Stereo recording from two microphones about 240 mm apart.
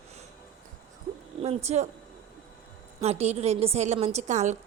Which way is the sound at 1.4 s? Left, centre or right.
Right.